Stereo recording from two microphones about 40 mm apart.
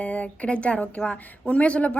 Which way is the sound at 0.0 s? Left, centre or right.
Left.